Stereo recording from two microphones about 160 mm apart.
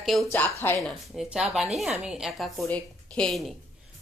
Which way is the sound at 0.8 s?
Centre (ahead or behind).